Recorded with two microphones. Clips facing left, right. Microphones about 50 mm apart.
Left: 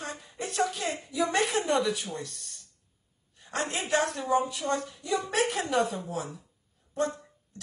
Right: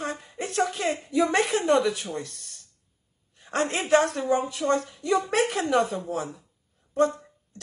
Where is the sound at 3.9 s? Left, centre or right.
Centre.